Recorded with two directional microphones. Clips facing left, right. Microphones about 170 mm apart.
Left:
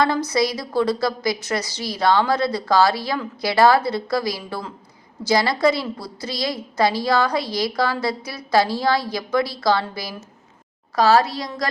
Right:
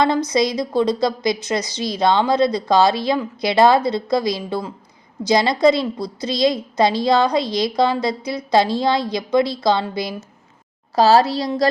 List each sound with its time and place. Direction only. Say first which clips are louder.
0.3 s a woman's voice: right 3 dB; 20° right (ahead or behind)